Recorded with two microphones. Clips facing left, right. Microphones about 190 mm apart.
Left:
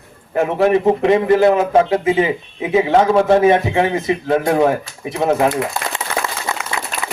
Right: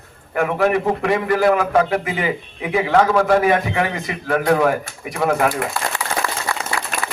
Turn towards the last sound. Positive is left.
turn(degrees=-50)  # may be behind; listen again after turning